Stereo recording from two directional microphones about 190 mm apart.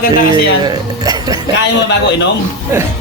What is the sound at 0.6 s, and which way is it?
Speech, 20° right (ahead or behind).